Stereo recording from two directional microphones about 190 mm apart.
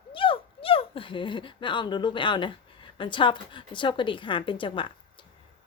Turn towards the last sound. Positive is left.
turn(degrees=25)  # may be behind; listen again after turning